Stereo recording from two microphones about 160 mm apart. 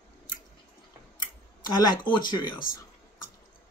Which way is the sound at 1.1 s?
25° left (ahead or behind).